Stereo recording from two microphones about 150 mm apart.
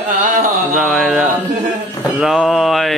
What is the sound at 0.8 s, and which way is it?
Speech, centre (ahead or behind).